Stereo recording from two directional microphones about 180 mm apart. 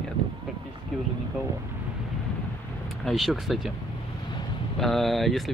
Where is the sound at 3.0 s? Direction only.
Centre (ahead or behind).